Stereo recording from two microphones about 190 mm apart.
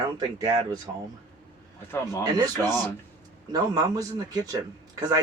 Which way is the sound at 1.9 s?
15° left (ahead or behind).